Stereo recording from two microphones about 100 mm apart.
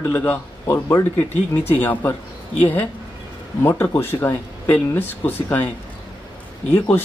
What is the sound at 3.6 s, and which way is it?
Speech, 25° left (ahead or behind).